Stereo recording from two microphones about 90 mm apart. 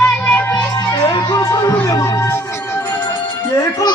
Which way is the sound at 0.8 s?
55° left (ahead or behind).